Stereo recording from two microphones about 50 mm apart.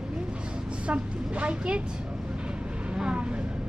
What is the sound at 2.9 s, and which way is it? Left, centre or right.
Vehicle, centre.